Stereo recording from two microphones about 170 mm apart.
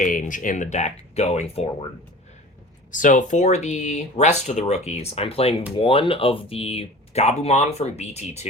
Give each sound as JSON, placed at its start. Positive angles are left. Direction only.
{"t": 0.0, "sound": "speech", "side_deg": 50}
{"t": 2.9, "sound": "speech", "side_deg": 50}